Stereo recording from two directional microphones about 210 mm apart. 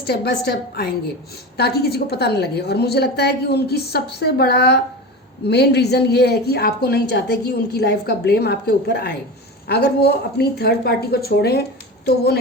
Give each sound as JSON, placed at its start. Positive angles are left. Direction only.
{"t": 0.1, "sound": "a woman's voice", "side_deg": 50}